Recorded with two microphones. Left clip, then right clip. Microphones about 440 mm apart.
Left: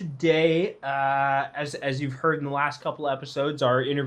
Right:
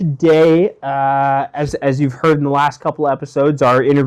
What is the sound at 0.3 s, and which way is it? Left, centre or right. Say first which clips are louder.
Speech: right 11 dB; right.